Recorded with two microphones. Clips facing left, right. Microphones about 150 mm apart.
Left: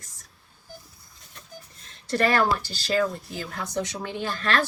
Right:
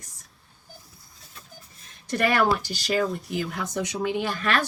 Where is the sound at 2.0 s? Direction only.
15° right (ahead or behind).